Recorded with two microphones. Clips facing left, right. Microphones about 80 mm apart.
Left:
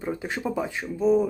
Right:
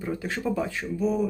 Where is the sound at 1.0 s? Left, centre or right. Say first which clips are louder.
Left 5 dB; left.